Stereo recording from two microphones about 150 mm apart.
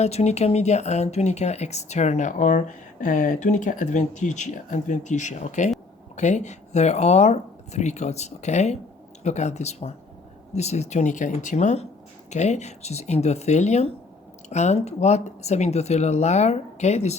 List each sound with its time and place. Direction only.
0.0 s speech: 45° left (ahead or behind)